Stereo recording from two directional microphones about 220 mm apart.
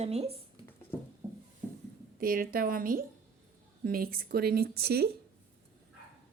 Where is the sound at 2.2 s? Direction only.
40° right (ahead or behind).